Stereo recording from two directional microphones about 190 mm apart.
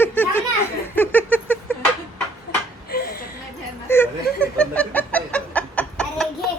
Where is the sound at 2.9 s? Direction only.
55° left (ahead or behind).